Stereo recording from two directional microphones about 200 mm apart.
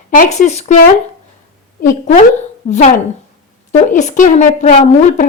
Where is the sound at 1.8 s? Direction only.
35° left (ahead or behind).